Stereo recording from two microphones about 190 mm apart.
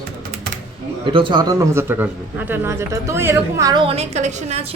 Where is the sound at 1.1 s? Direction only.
25° right (ahead or behind).